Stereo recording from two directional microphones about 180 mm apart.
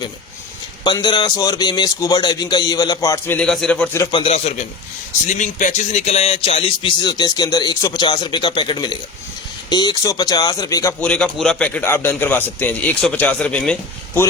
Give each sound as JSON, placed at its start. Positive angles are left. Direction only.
{"t": 0.9, "sound": "a man's voice", "side_deg": 25}
{"t": 3.3, "sound": "a man's voice", "side_deg": 0}
{"t": 4.1, "sound": "a man's voice", "side_deg": 35}
{"t": 11.0, "sound": "a man's voice", "side_deg": 5}